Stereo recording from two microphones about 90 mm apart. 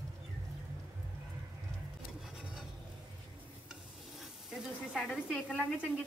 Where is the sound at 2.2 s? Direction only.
5° right (ahead or behind).